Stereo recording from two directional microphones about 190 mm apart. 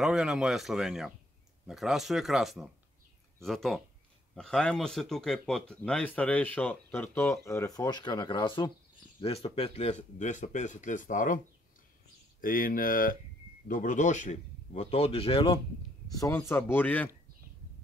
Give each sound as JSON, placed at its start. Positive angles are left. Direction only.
{"t": 0.0, "sound": "speech", "side_deg": -5}
{"t": 16.1, "sound": "speech", "side_deg": 15}